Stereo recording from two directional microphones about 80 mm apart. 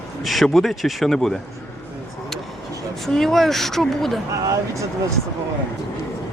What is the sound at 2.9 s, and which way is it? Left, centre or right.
Speech, centre.